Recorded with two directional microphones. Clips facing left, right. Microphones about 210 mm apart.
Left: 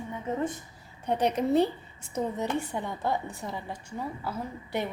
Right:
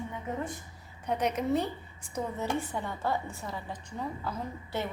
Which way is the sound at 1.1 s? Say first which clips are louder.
Left 3 dB; 30° left (ahead or behind).